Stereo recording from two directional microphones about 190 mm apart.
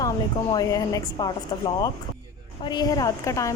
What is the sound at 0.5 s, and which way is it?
Speech, 20° left (ahead or behind).